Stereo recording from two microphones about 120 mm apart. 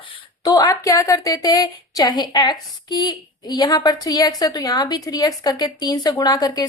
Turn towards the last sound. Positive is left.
turn(degrees=35)  # may be behind; listen again after turning